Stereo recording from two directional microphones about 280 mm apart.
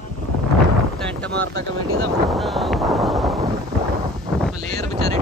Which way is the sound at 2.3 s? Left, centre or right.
Centre.